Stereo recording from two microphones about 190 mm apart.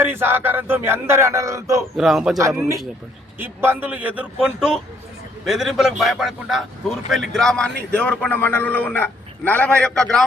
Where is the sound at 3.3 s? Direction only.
10° right (ahead or behind).